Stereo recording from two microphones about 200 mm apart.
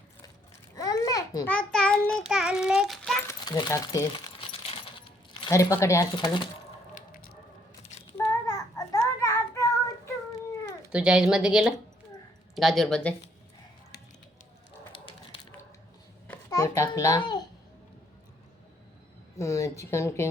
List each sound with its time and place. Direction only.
0.8 s babbling: 20° left (ahead or behind)
1.5 s child singing: 5° left (ahead or behind)
3.2 s coin: 20° left (ahead or behind)
7.1 s a sound: 50° left (ahead or behind)
8.2 s child singing: 15° left (ahead or behind)
10.9 s child singing: 5° right (ahead or behind)
14.9 s a sound: 25° left (ahead or behind)
16.5 s babbling: 15° left (ahead or behind)
19.4 s a woman's voice: 15° left (ahead or behind)